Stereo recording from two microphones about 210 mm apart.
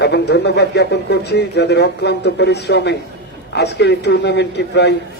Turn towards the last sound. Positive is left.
turn(degrees=55)  # may be behind; listen again after turning